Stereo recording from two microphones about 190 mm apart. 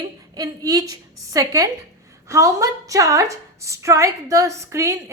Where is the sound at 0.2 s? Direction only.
20° right (ahead or behind).